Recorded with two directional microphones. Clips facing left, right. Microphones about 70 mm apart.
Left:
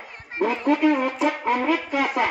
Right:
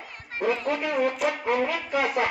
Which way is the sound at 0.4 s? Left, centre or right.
Left.